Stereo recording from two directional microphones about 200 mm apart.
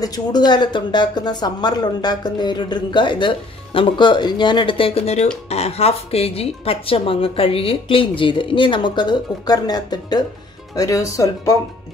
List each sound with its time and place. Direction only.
0.0 s speech: 20° left (ahead or behind)